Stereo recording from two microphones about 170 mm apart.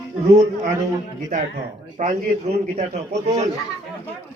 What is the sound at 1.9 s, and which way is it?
A man's voice, 45° right (ahead or behind).